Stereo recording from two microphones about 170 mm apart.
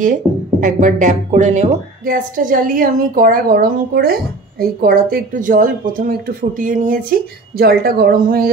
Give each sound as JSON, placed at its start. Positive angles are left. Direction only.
{"t": 0.0, "sound": "speech", "side_deg": -50}